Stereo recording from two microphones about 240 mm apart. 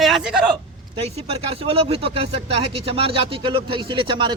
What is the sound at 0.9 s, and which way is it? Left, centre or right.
Speech, right.